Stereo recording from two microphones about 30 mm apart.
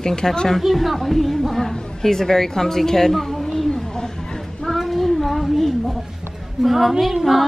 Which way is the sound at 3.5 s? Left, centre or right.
Centre.